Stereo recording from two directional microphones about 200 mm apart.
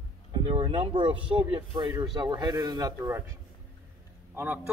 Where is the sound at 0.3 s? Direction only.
25° right (ahead or behind).